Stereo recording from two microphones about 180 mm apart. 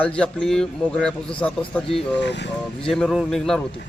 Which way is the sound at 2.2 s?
75° left (ahead or behind).